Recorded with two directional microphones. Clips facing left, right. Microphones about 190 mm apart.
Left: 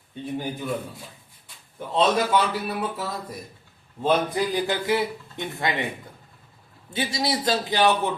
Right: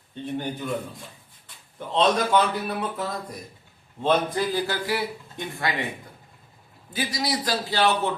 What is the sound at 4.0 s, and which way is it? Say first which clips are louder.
A man's voice: even; 15° left (ahead or behind).